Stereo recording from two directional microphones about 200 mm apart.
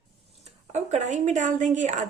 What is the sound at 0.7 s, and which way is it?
A woman's voice, 35° right (ahead or behind).